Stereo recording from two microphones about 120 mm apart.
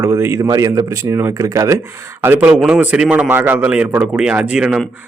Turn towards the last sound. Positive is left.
turn(degrees=-5)  # may be behind; listen again after turning